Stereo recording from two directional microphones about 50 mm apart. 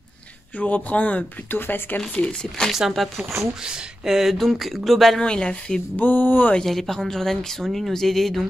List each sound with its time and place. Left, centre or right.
0.6 s speech: left
1.5 s speech: left
2.0 s speech: centre
2.9 s speech: centre
3.6 s speech: centre
5.2 s speech: centre
5.9 s speech: left
6.6 s speech: centre